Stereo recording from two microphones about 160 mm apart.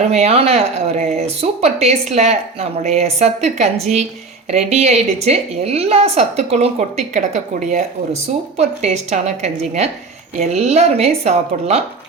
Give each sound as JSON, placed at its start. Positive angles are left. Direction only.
{"t": 0.1, "sound": "a woman's voice", "side_deg": -40}